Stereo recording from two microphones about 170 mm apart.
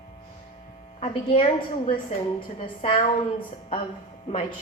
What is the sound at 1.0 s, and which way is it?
A woman's voice, 35° left (ahead or behind).